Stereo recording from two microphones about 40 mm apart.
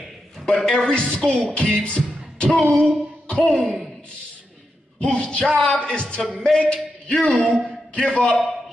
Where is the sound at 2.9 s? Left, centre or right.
Left.